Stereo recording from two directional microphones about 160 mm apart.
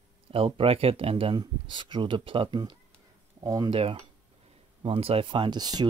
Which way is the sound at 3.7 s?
35° right (ahead or behind).